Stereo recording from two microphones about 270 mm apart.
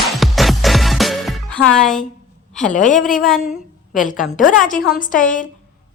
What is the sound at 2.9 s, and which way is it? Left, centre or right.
Speech, centre.